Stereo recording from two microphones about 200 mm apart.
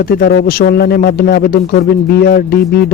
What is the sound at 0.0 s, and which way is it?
Speech, 50° left (ahead or behind).